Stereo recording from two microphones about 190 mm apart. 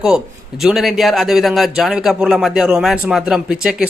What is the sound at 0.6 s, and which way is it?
A man's voice, centre (ahead or behind).